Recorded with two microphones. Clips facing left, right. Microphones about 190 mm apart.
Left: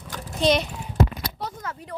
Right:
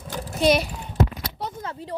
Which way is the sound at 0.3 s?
10° right (ahead or behind).